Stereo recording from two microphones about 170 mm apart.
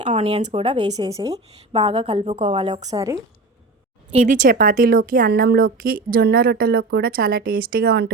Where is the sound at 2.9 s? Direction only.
20° right (ahead or behind).